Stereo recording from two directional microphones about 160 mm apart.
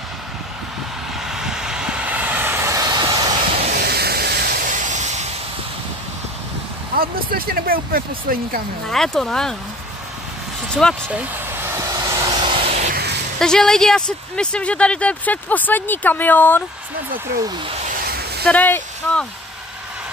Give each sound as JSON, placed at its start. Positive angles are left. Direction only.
{"t": 1.3, "sound": "vehicle", "side_deg": -5}
{"t": 3.7, "sound": "steam", "side_deg": -85}
{"t": 7.0, "sound": "speech", "side_deg": -65}
{"t": 8.8, "sound": "speech", "side_deg": 5}
{"t": 10.8, "sound": "speech", "side_deg": 5}
{"t": 11.1, "sound": "vehicle", "side_deg": -15}
{"t": 12.4, "sound": "vehicle", "side_deg": -35}
{"t": 12.8, "sound": "a sound", "side_deg": -80}
{"t": 13.4, "sound": "speech", "side_deg": 5}
{"t": 17.6, "sound": "a sound", "side_deg": -40}
{"t": 17.9, "sound": "a sound", "side_deg": -75}
{"t": 18.4, "sound": "speech", "side_deg": 10}